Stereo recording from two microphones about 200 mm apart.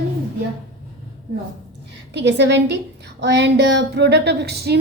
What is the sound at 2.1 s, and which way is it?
A woman's voice, 60° right (ahead or behind).